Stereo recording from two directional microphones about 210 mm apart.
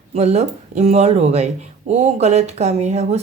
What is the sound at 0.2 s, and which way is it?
Speech, 30° right (ahead or behind).